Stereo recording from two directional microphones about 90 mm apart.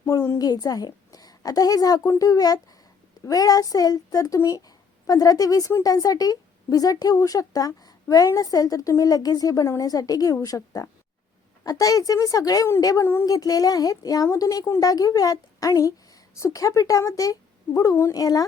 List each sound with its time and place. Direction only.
0.0 s a woman's voice: 40° left (ahead or behind)